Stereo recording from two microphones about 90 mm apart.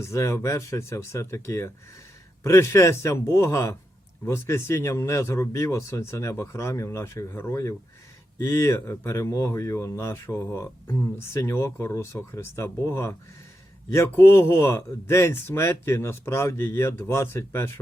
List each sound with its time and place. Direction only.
0.0 s speech: 35° left (ahead or behind)